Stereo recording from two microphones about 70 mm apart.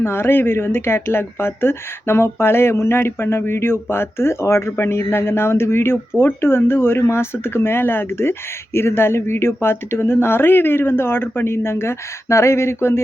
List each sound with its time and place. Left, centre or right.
0.0 s speech: left